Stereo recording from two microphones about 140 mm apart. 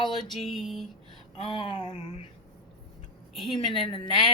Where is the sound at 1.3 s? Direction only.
40° left (ahead or behind).